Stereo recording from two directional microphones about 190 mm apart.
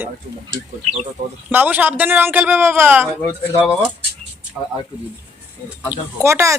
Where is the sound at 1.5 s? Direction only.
10° right (ahead or behind).